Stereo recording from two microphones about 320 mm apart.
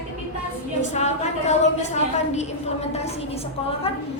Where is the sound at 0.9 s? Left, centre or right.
Left.